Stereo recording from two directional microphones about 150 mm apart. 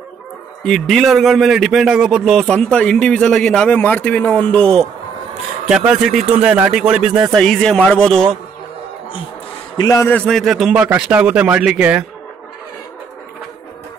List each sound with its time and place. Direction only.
0.7 s a man's voice: centre (ahead or behind)
5.7 s a man's voice: 5° right (ahead or behind)
9.8 s a man's voice: 20° left (ahead or behind)
10.1 s a man's voice: 5° left (ahead or behind)